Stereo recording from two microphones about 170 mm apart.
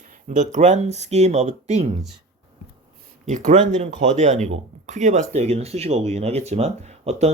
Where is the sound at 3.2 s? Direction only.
45° right (ahead or behind).